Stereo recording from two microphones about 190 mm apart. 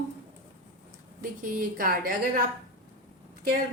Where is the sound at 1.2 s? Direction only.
45° right (ahead or behind).